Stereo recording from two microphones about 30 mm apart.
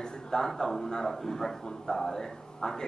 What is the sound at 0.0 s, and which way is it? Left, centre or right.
A man's voice, left.